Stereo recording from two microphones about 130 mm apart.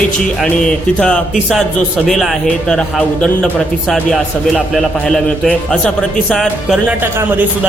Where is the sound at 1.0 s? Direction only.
5° left (ahead or behind).